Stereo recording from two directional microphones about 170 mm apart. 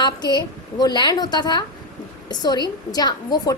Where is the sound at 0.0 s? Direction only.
25° left (ahead or behind).